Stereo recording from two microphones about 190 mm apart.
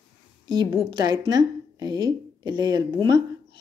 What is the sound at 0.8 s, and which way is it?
A woman's voice, 20° right (ahead or behind).